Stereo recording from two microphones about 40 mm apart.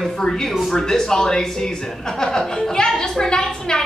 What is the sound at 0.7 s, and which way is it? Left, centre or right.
A woman's voice, centre.